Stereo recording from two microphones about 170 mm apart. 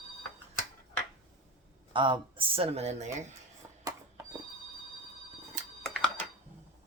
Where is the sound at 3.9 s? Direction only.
15° right (ahead or behind).